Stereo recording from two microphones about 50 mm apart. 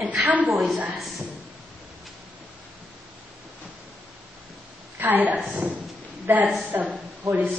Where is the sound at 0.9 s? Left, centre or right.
Centre.